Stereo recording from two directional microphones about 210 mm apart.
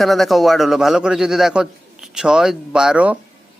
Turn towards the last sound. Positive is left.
turn(degrees=-5)  # may be behind; listen again after turning